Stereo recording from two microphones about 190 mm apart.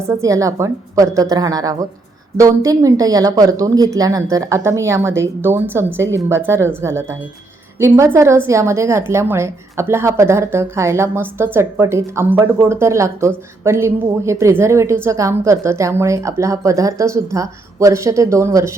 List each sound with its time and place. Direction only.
0.0 s a woman's voice: 15° right (ahead or behind)